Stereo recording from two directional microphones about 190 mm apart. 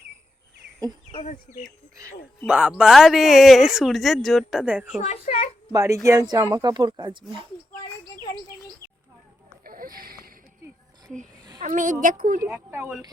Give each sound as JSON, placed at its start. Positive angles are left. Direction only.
{"t": 1.1, "sound": "speech", "side_deg": 35}
{"t": 2.5, "sound": "speech", "side_deg": -5}
{"t": 4.9, "sound": "a child's voice", "side_deg": 35}
{"t": 5.7, "sound": "speech", "side_deg": -15}
{"t": 9.6, "sound": "a sound", "side_deg": -50}
{"t": 11.6, "sound": "a woman's voice", "side_deg": -45}
{"t": 12.5, "sound": "speech", "side_deg": -10}